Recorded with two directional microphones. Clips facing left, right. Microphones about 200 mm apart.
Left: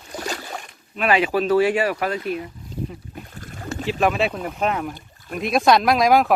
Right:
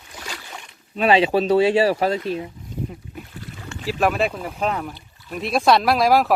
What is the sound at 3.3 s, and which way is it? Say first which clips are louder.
Boat: left 5 dB; 45° left (ahead or behind).